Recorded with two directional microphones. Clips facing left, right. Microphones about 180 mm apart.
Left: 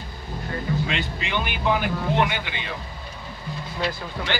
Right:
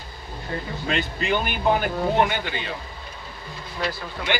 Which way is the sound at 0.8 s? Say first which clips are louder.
Right 4 dB; 45° right (ahead or behind).